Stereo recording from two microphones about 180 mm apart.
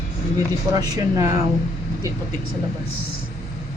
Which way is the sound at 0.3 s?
20° right (ahead or behind).